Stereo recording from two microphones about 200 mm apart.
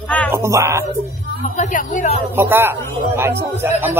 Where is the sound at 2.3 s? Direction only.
10° right (ahead or behind).